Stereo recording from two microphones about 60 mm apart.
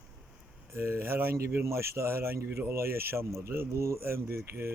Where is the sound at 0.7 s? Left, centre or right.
Right.